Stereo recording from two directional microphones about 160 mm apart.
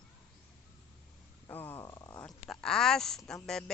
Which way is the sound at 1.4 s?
15° left (ahead or behind).